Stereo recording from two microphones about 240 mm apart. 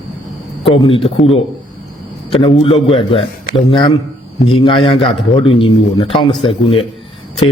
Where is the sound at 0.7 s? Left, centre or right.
Left.